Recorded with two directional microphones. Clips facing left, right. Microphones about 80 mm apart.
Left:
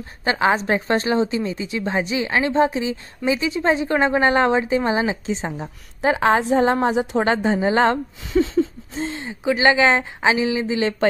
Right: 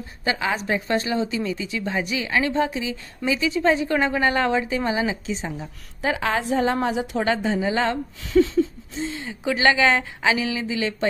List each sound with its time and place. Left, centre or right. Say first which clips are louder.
0.2 s a woman's voice: left 6 dB; left
8.3 s a woman's voice: even; left
9.4 s speech: left 3 dB; centre